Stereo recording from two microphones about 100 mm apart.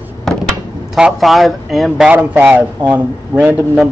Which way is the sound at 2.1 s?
15° right (ahead or behind).